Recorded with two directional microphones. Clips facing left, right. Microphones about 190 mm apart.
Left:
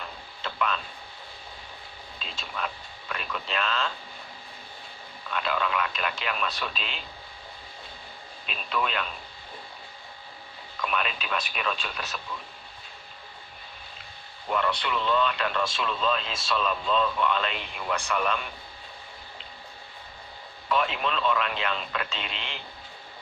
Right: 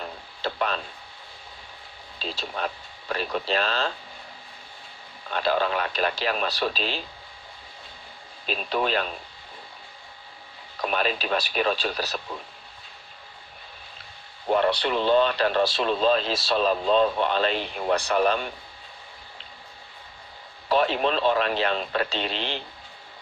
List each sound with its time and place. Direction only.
0.4 s a sound: 35° right (ahead or behind)
2.1 s speech: 35° right (ahead or behind)
5.3 s speech: 35° right (ahead or behind)
8.4 s speech: 35° right (ahead or behind)
10.8 s speech: 35° right (ahead or behind)
14.5 s speech: 35° right (ahead or behind)
20.7 s speech: 35° right (ahead or behind)